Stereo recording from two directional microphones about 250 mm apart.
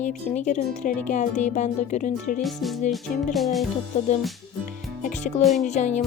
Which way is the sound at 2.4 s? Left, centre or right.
Centre.